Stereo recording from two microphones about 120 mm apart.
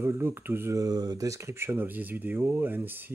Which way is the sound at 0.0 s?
20° right (ahead or behind).